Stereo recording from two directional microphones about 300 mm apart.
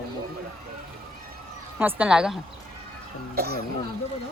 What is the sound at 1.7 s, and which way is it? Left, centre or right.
Speech, centre.